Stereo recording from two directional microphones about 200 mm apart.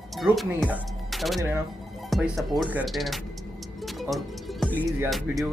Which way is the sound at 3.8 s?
Centre (ahead or behind).